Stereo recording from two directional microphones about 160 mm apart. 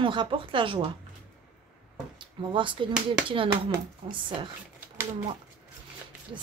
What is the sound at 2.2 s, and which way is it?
Speech, 30° right (ahead or behind).